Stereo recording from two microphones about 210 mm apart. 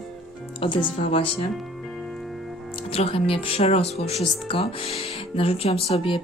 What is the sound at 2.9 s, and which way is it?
Speech, 25° left (ahead or behind).